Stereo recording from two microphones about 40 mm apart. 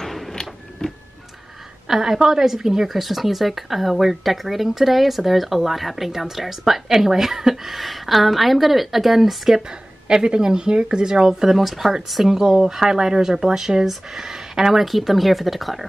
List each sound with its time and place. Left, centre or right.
0.0 s a sound: centre
1.9 s speech: centre
10.0 s a woman's voice: right
11.4 s speech: centre